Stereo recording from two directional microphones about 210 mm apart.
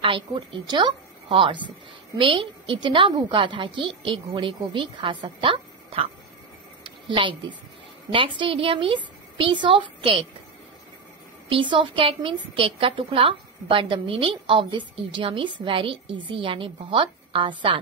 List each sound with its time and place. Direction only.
0.0 s a woman's voice: 25° right (ahead or behind)
7.1 s a woman's voice: 25° right (ahead or behind)
11.4 s a woman's voice: 25° right (ahead or behind)